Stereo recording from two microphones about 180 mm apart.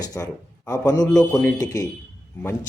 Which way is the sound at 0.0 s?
20° left (ahead or behind).